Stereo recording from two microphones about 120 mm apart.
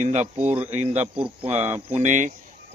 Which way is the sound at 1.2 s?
50° right (ahead or behind).